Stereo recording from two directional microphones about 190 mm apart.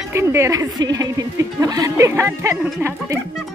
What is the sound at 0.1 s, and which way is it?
Speech, 15° right (ahead or behind).